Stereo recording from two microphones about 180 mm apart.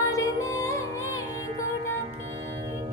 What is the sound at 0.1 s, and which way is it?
Music, 20° left (ahead or behind).